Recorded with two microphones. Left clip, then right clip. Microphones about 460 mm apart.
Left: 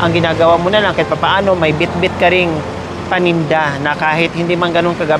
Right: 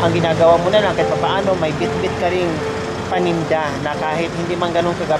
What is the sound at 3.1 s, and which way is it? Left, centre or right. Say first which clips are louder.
Speech: left 5 dB; left.